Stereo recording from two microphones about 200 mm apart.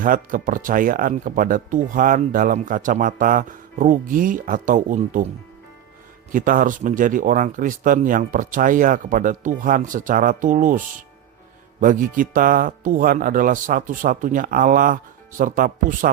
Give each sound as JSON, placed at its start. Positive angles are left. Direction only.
{"t": 0.0, "sound": "speech", "side_deg": -45}
{"t": 6.3, "sound": "speech", "side_deg": -40}